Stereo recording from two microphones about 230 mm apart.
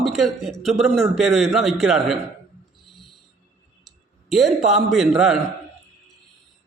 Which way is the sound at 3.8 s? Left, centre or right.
Centre.